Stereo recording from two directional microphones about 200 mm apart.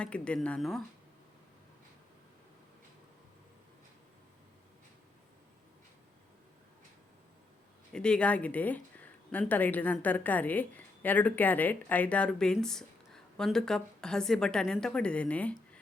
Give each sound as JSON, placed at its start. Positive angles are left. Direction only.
{"t": 0.0, "sound": "speech", "side_deg": 5}
{"t": 7.9, "sound": "speech", "side_deg": 5}